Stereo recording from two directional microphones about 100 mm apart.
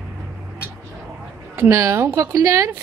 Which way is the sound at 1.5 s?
30° right (ahead or behind).